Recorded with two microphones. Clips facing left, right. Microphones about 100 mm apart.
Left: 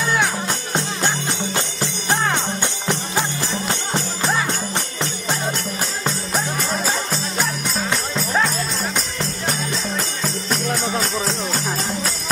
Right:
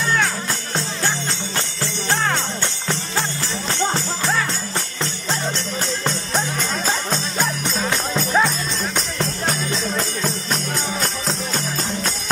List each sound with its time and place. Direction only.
0.7 s music: 15° left (ahead or behind)
6.0 s music: 5° left (ahead or behind)